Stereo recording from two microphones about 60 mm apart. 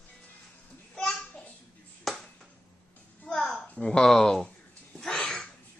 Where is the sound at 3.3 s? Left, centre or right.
Centre.